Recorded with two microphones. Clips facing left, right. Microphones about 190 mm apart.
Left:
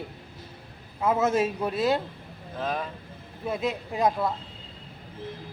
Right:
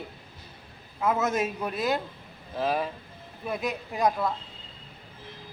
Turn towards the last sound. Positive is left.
turn(degrees=25)  # may be behind; listen again after turning